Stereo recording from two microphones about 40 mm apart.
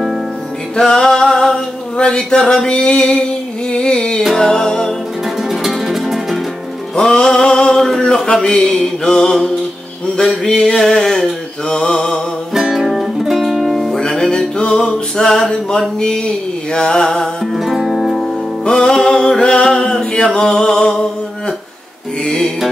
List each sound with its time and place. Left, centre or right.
0.7 s music: centre
5.5 s music: centre
7.0 s a sound: centre
7.8 s a sound: centre
8.4 s music: centre
11.7 s mantra: centre
12.5 s music: centre
13.9 s music: centre
14.6 s a sound: left
16.0 s music: centre
17.4 s music: centre
18.6 s music: centre
20.3 s a sound: centre
22.2 s music: centre